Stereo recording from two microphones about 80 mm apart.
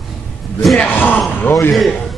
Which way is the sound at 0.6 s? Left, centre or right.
Centre.